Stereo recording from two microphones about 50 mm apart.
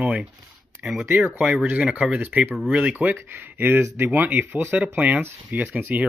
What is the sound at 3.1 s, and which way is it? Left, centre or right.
Speech, right.